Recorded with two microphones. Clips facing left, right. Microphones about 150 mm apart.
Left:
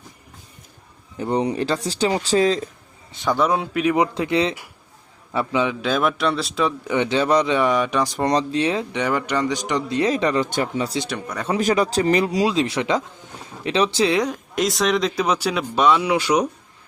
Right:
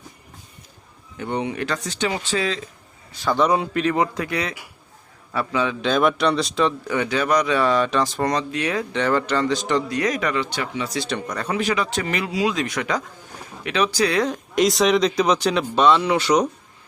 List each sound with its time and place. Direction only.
1.2 s speech: 35° left (ahead or behind)
3.1 s speech: 20° left (ahead or behind)
3.3 s speech: centre (ahead or behind)
3.8 s speech: 15° left (ahead or behind)
5.8 s speech: 5° left (ahead or behind)
8.2 s speech: 30° left (ahead or behind)
10.0 s speech: 30° left (ahead or behind)
10.4 s speech: 45° left (ahead or behind)
11.1 s speech: 10° left (ahead or behind)
11.6 s speech: 40° left (ahead or behind)
12.5 s speech: 25° left (ahead or behind)
14.3 s speech: centre (ahead or behind)